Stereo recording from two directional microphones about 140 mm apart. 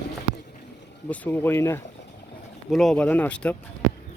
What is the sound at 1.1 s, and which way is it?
Speech, 15° left (ahead or behind).